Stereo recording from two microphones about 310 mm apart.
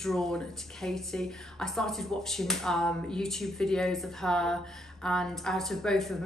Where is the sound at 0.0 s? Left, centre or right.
Centre.